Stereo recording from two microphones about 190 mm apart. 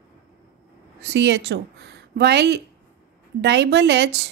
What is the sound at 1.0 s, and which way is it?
A woman's voice, 65° right (ahead or behind).